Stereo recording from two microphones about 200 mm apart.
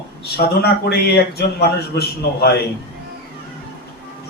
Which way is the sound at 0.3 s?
55° left (ahead or behind).